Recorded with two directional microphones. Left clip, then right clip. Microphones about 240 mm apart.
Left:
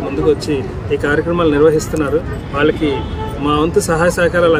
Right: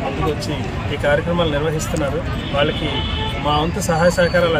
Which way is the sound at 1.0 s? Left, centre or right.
Left.